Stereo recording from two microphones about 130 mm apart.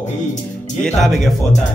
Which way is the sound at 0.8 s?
5° left (ahead or behind).